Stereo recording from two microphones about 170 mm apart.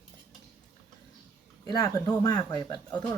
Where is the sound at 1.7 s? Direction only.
20° left (ahead or behind).